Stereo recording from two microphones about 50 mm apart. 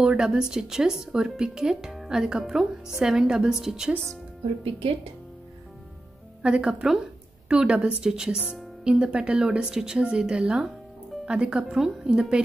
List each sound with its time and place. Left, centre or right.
0.0 s a woman's voice: centre
6.4 s speech: right
6.7 s speech: centre